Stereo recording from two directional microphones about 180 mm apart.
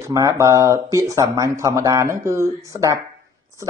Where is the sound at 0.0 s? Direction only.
15° right (ahead or behind).